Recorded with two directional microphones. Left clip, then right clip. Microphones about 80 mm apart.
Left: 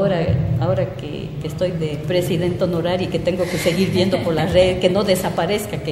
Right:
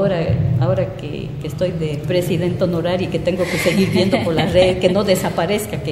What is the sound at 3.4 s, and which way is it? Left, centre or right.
Speech, right.